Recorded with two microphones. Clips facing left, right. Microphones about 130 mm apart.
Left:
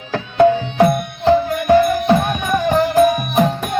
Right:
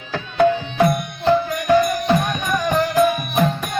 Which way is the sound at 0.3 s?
25° left (ahead or behind).